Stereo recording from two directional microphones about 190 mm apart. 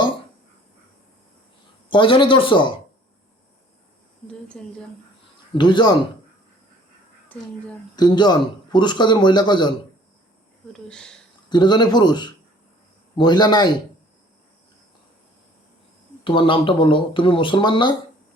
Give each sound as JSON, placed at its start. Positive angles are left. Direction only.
{"t": 1.9, "sound": "a man's voice", "side_deg": 25}
{"t": 4.3, "sound": "a sound", "side_deg": 5}
{"t": 5.5, "sound": "a man's voice", "side_deg": 25}
{"t": 7.3, "sound": "speech", "side_deg": 10}
{"t": 7.9, "sound": "a man's voice", "side_deg": 20}
{"t": 10.7, "sound": "speech", "side_deg": 5}
{"t": 11.4, "sound": "a man's voice", "side_deg": 25}
{"t": 16.2, "sound": "a man's voice", "side_deg": 25}